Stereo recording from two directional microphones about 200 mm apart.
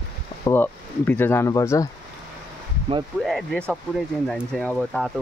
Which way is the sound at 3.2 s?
Centre (ahead or behind).